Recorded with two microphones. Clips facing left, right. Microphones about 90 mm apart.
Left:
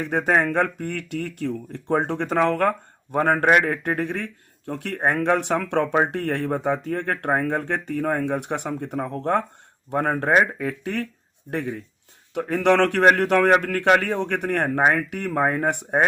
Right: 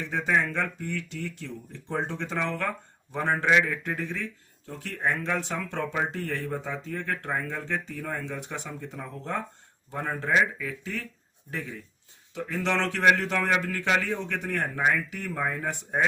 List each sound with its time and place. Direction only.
0.0 s speech: 55° left (ahead or behind)